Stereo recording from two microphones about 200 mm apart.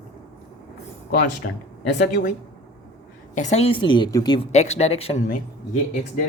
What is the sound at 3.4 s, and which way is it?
Speech, 35° left (ahead or behind).